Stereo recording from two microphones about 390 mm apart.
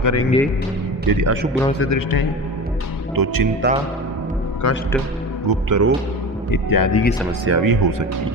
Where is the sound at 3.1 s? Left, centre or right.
Right.